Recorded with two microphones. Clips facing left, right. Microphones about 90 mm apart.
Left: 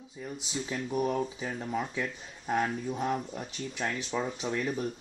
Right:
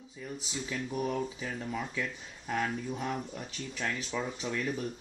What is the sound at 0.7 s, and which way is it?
Speech, 15° left (ahead or behind).